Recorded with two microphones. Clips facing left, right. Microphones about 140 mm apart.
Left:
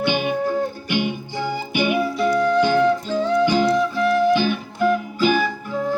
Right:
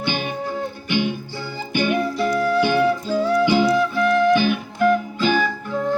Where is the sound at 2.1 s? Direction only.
Centre (ahead or behind).